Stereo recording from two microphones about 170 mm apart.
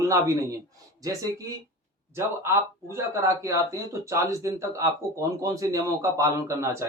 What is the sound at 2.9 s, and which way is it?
Speech, 15° right (ahead or behind).